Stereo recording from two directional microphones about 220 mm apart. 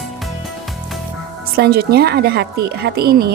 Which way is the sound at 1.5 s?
45° right (ahead or behind).